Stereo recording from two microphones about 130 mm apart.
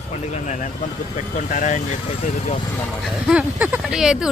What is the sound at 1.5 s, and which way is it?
Speech, 75° left (ahead or behind).